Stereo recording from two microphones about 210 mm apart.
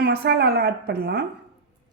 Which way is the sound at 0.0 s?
50° right (ahead or behind).